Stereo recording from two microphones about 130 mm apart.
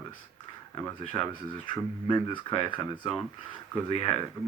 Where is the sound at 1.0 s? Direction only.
40° left (ahead or behind).